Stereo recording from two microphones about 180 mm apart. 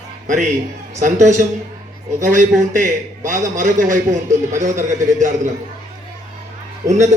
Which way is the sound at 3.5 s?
45° right (ahead or behind).